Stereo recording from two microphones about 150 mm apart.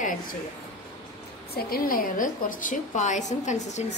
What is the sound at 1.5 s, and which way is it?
A woman's voice, 75° left (ahead or behind).